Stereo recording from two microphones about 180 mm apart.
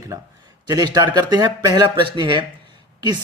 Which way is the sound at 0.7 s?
20° right (ahead or behind).